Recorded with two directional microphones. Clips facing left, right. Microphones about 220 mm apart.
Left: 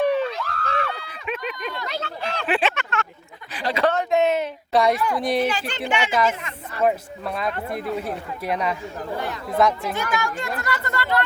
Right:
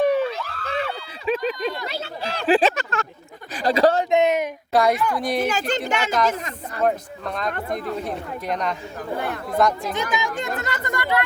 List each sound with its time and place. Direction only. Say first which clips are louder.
0.1 s a sound: right 1 dB; 5° right (ahead or behind)
1.0 s a sound: right 6 dB; 30° right (ahead or behind)
1.9 s speech: left 1 dB; 5° right (ahead or behind)
2.4 s speech: right 6 dB; 35° right (ahead or behind)
4.1 s speech: right 1 dB; 15° right (ahead or behind)
4.7 s speech: even; centre (ahead or behind)
5.4 s a woman's voice: right 1 dB; 45° right (ahead or behind)
6.8 s speech: left 1 dB; 5° left (ahead or behind)
9.1 s speech: right 3 dB; 55° right (ahead or behind)
9.5 s speech: left 1 dB; 5° left (ahead or behind)
9.9 s speech: right 1 dB; 20° right (ahead or behind)